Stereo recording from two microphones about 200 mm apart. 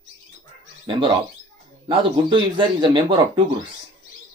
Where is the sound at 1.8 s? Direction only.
25° right (ahead or behind).